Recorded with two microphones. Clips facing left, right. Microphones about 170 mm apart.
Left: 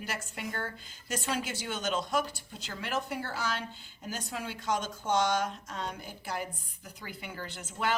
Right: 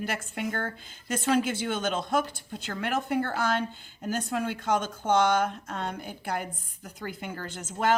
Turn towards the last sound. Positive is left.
turn(degrees=-45)  # may be behind; listen again after turning